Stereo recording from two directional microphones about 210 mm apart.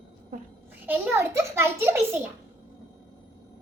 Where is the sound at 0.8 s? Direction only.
10° right (ahead or behind).